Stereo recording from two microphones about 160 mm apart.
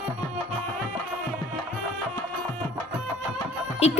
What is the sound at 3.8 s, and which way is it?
Music, 45° left (ahead or behind).